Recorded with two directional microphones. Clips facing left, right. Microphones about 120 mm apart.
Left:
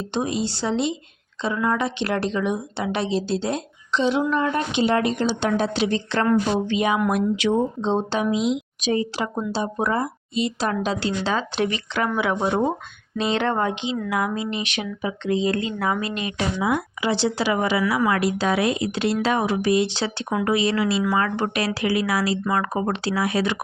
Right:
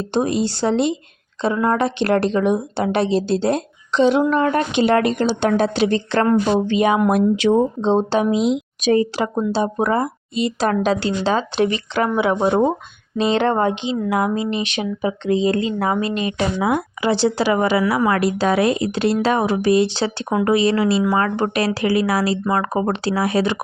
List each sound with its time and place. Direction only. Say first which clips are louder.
0.1 s a woman's voice: right 6 dB; 50° right (ahead or behind)
8.9 s a woman's voice: right 6 dB; 55° right (ahead or behind)
11.0 s a woman's voice: right 4 dB; 35° right (ahead or behind)
16.6 s a woman's voice: right 3 dB; 50° right (ahead or behind); by 23.6 s 35° right (ahead or behind)